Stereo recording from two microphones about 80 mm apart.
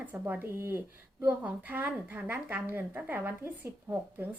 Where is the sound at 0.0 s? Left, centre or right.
Right.